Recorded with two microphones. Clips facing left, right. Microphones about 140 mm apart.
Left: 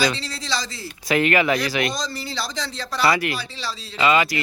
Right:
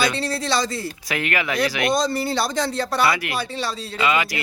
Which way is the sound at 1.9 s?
55° right (ahead or behind).